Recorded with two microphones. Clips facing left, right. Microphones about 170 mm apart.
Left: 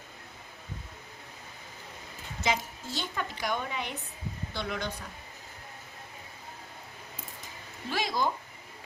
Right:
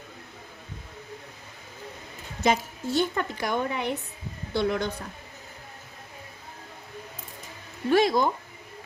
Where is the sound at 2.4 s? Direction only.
55° right (ahead or behind).